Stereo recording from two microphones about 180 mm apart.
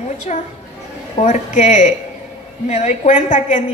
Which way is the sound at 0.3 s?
40° left (ahead or behind).